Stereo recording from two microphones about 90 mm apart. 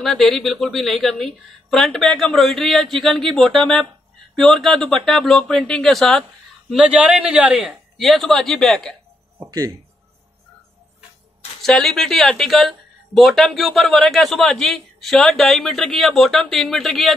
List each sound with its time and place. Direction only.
0.0 s speech: centre (ahead or behind)
6.9 s a man's voice: 15° right (ahead or behind)
7.5 s speech: centre (ahead or behind)
9.5 s speech: 40° right (ahead or behind)
11.6 s speech: 5° left (ahead or behind)